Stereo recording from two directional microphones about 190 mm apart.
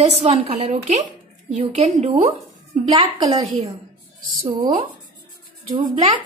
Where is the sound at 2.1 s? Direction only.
35° right (ahead or behind).